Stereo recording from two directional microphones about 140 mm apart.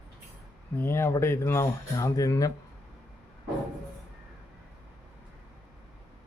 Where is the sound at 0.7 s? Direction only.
15° left (ahead or behind).